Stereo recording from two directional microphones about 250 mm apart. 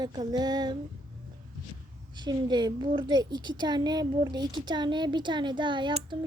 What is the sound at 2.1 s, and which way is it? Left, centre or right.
A woman's voice, centre.